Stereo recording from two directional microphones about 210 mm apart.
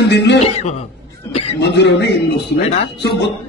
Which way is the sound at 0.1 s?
55° left (ahead or behind).